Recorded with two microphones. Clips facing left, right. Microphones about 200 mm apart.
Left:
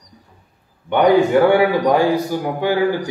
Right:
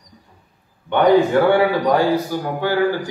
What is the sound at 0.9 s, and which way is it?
A man's voice, 15° left (ahead or behind).